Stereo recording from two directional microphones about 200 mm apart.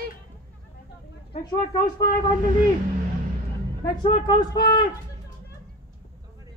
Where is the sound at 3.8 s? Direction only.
20° left (ahead or behind).